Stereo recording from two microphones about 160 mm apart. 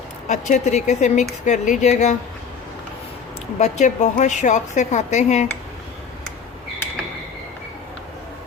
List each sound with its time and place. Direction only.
0.3 s a woman's voice: 50° left (ahead or behind)
3.6 s a woman's voice: 50° left (ahead or behind)